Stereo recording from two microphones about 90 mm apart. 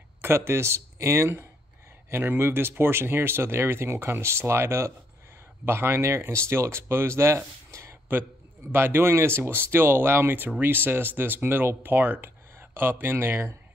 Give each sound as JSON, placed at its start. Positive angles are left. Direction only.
{"t": 0.2, "sound": "speech", "side_deg": -30}